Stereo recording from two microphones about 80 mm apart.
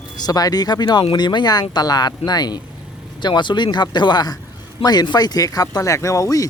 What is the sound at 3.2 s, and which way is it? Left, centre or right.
Speech, left.